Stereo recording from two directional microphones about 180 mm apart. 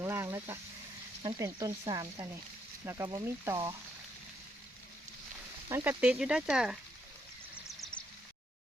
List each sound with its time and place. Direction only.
0.0 s frying: 15° right (ahead or behind)
1.2 s speech: 20° right (ahead or behind)
5.6 s speech: 15° right (ahead or behind)
7.7 s a sound: centre (ahead or behind)